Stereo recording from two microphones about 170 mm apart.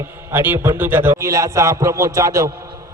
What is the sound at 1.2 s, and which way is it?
Music, 20° right (ahead or behind).